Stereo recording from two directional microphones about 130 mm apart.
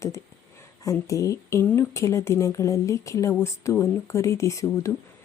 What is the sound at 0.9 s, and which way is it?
Speech, 25° left (ahead or behind).